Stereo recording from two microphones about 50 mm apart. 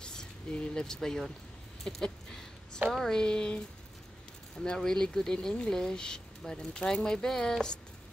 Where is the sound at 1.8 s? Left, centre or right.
Centre.